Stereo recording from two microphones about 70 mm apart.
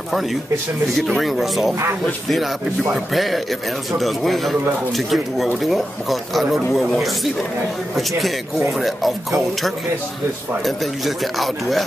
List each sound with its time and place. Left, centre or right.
0.9 s speech: centre
8.5 s speech: centre